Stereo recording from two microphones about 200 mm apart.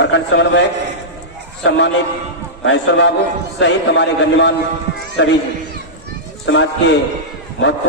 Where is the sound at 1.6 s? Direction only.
65° left (ahead or behind).